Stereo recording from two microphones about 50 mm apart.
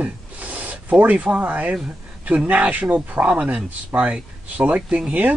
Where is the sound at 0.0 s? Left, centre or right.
Right.